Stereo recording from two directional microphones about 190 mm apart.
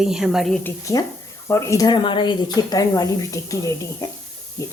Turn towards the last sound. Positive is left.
turn(degrees=15)  # may be behind; listen again after turning